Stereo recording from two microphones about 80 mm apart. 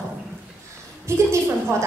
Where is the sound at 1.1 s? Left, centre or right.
Right.